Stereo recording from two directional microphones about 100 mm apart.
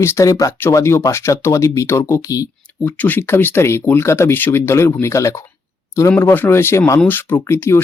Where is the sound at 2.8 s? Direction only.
15° left (ahead or behind).